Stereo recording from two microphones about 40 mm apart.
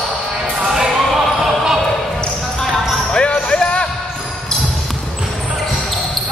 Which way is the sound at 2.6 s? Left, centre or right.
Centre.